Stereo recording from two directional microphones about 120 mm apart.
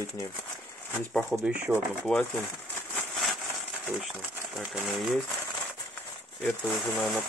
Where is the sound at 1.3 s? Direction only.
10° right (ahead or behind).